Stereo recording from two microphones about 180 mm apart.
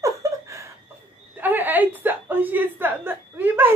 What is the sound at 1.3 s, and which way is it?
A woman's voice, 10° right (ahead or behind).